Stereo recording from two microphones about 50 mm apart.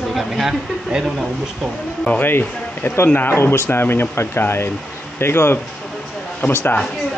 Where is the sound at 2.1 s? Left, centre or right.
Left.